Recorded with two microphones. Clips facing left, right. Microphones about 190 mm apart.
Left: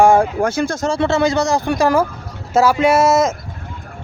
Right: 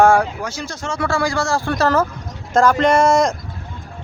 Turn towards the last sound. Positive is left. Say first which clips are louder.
# left 1 dB
turn(degrees=5)  # may be behind; listen again after turning